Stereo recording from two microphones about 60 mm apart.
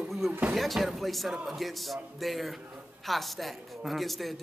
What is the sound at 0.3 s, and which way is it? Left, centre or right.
Speech, right.